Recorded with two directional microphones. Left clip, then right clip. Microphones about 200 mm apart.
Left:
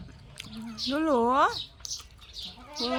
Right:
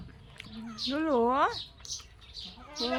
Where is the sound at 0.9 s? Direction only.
15° left (ahead or behind).